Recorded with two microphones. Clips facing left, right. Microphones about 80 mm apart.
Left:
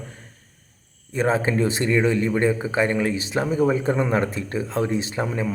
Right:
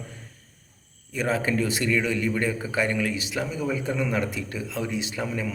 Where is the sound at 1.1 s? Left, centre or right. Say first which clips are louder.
Left 4 dB; left.